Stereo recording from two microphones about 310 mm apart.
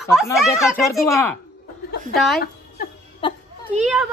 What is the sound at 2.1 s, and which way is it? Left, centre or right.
Speech, centre.